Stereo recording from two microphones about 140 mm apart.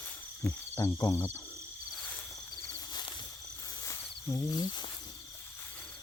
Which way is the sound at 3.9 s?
25° left (ahead or behind).